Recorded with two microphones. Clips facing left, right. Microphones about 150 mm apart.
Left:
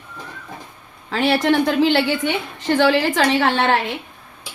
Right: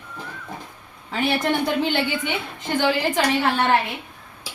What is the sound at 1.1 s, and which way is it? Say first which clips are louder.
A woman's voice: left 5 dB; 90° left.